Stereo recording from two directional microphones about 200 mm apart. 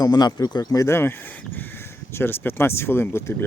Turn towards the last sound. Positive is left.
turn(degrees=10)  # may be behind; listen again after turning